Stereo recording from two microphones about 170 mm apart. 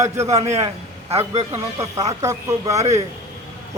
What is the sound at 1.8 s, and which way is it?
Speech, 20° right (ahead or behind).